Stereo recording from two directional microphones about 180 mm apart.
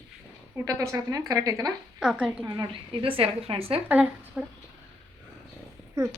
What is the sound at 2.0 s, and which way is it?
Speech, 5° right (ahead or behind).